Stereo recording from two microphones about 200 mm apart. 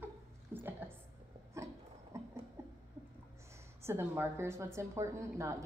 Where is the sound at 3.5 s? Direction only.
10° right (ahead or behind).